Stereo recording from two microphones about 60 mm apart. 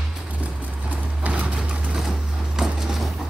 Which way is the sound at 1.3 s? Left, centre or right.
Centre.